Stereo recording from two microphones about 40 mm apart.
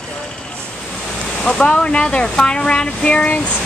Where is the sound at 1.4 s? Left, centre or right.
Left.